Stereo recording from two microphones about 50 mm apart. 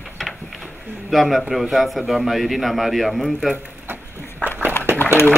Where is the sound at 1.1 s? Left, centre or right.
Centre.